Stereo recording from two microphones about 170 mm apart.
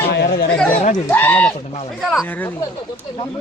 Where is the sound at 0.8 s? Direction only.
45° left (ahead or behind).